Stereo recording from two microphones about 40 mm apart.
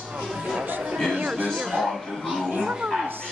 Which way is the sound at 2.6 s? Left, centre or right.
Centre.